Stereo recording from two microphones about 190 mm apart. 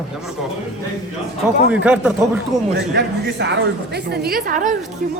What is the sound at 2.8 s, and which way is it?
Speech, 65° right (ahead or behind).